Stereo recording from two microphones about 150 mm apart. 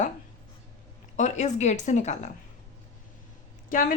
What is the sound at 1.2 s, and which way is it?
A woman's voice, 50° left (ahead or behind).